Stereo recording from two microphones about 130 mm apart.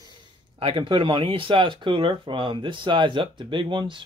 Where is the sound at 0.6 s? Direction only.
45° right (ahead or behind).